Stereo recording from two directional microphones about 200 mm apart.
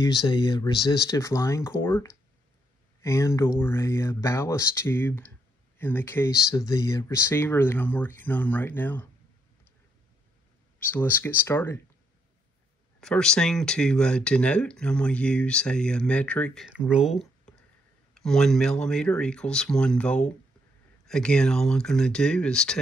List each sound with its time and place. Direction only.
0.3 s speech: 20° left (ahead or behind)
10.8 s speech: 10° left (ahead or behind)
13.0 s speech: 5° left (ahead or behind)